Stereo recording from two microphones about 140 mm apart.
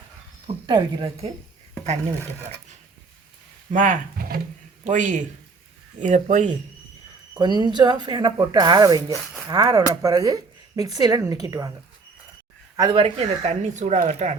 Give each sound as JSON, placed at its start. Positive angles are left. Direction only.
{"t": 0.4, "sound": "speech", "side_deg": -35}
{"t": 3.7, "sound": "speech", "side_deg": -75}
{"t": 7.3, "sound": "speech", "side_deg": -30}
{"t": 9.1, "sound": "speech", "side_deg": 0}
{"t": 9.5, "sound": "speech", "side_deg": -25}
{"t": 12.9, "sound": "speech", "side_deg": -40}